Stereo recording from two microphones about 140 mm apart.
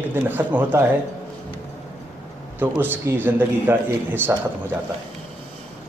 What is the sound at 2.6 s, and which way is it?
A man's voice, 15° right (ahead or behind).